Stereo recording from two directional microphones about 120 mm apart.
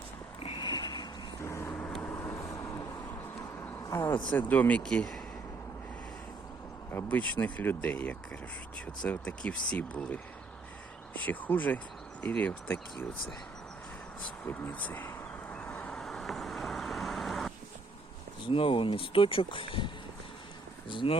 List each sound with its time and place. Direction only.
0.4 s a sound: 40° left (ahead or behind)
1.4 s vehicle: 20° left (ahead or behind)
3.1 s a sound: 20° left (ahead or behind)
4.3 s speech: 15° left (ahead or behind)
6.9 s speech: 15° left (ahead or behind)
11.3 s speech: 15° left (ahead or behind)
14.4 s a sound: 15° left (ahead or behind)
15.7 s vehicle: 5° left (ahead or behind)
18.4 s speech: 45° left (ahead or behind)